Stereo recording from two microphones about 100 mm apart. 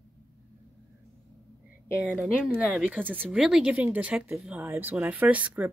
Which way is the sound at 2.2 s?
10° right (ahead or behind).